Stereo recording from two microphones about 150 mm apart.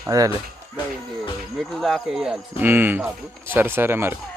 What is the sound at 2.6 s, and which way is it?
Speech, 15° right (ahead or behind).